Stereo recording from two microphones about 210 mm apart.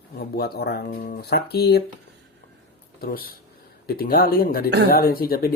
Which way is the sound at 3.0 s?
45° left (ahead or behind).